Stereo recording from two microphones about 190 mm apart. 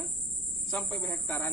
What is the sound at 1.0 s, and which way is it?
Speech, 15° left (ahead or behind).